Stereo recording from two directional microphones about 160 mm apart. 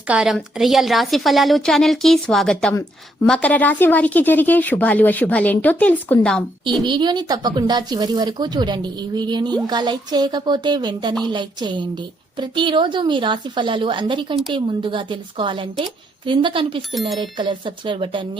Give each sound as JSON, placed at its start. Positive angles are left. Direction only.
{"t": 0.1, "sound": "a woman's voice", "side_deg": -5}
{"t": 6.8, "sound": "a woman's voice", "side_deg": -30}
{"t": 16.9, "sound": "a woman's voice", "side_deg": 0}
{"t": 17.2, "sound": "a woman's voice", "side_deg": -30}